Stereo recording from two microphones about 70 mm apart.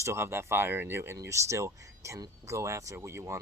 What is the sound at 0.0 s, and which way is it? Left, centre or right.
Speech, right.